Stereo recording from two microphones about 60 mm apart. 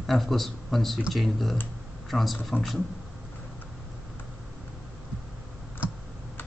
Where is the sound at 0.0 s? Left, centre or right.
Centre.